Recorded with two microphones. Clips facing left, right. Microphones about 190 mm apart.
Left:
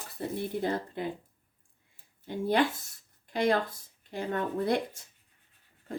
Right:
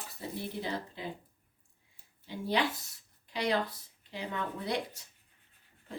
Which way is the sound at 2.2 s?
50° left (ahead or behind).